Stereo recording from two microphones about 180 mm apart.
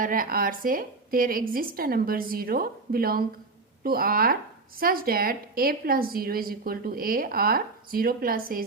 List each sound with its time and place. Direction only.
0.0 s a woman's voice: 50° right (ahead or behind)